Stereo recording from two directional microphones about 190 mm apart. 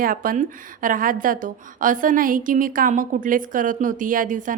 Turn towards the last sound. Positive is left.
turn(degrees=-45)  # may be behind; listen again after turning